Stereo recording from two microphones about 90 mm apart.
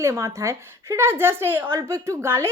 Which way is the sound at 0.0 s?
30° right (ahead or behind).